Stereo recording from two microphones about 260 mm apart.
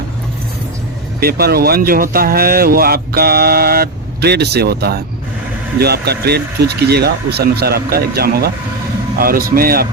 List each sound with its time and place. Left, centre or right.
1.2 s speech: right